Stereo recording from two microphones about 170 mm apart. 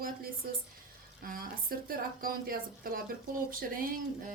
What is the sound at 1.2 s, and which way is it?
Speech, 60° right (ahead or behind).